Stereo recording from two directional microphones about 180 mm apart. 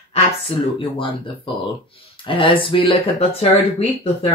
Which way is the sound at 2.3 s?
30° left (ahead or behind).